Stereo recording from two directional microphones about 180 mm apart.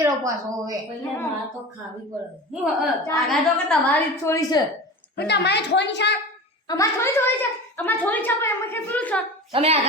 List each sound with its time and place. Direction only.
0.0 s a woman's voice: 20° right (ahead or behind)
2.5 s a woman's voice: centre (ahead or behind); by 4.6 s 15° left (ahead or behind)
5.1 s a woman's voice: 70° left (ahead or behind)
6.7 s a woman's voice: 15° left (ahead or behind)
9.5 s a woman's voice: 35° right (ahead or behind)